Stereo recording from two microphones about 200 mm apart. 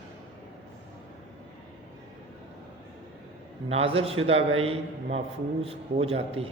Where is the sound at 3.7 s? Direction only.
30° right (ahead or behind).